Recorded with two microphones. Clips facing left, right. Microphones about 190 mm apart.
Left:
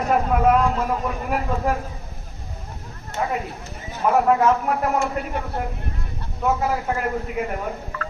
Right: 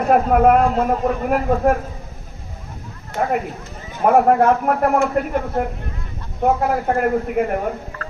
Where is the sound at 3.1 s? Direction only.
55° right (ahead or behind).